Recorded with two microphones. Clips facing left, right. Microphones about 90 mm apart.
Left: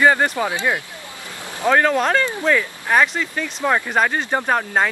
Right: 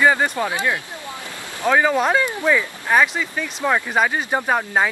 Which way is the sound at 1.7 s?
5° right (ahead or behind).